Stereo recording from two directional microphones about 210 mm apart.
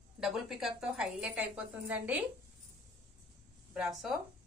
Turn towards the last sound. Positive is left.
turn(degrees=0)  # may be behind; listen again after turning